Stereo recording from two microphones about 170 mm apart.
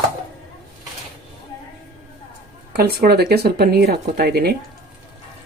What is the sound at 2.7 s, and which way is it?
Speech, 65° right (ahead or behind).